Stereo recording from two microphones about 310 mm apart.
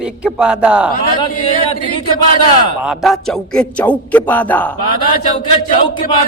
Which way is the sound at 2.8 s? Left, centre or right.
Centre.